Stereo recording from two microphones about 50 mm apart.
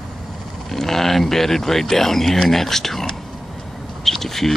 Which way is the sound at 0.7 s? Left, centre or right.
Centre.